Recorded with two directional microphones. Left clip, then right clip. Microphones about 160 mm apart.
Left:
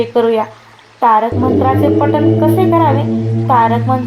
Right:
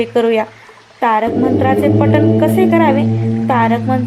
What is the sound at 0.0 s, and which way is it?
Speech, 5° right (ahead or behind).